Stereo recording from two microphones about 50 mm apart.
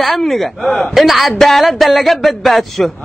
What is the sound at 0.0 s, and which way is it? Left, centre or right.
A woman's voice, centre.